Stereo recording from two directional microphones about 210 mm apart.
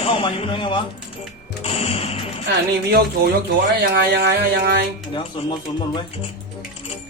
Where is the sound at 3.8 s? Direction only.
50° right (ahead or behind).